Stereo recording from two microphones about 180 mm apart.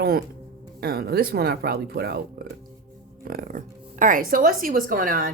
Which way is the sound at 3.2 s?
55° right (ahead or behind).